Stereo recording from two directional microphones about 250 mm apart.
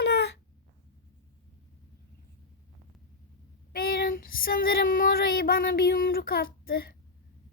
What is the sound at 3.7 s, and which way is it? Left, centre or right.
Female singing, left.